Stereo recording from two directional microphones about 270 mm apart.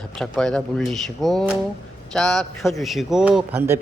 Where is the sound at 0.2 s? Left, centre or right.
Centre.